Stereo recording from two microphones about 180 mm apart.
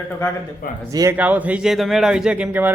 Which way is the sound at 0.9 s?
20° right (ahead or behind).